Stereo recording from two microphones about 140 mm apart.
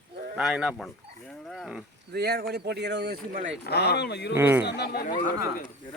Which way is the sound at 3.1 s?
90° right.